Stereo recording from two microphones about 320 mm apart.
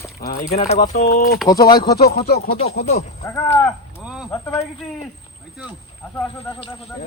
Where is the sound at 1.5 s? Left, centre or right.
Centre.